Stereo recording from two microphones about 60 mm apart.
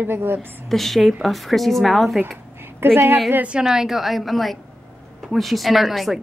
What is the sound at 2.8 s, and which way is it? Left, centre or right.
Speech, right.